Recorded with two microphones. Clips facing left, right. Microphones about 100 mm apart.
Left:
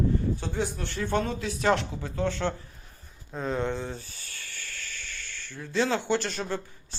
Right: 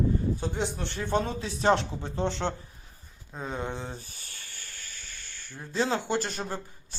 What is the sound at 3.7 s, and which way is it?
Speech, 20° right (ahead or behind).